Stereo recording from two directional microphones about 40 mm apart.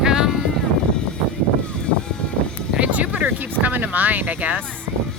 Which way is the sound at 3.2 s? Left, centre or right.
Right.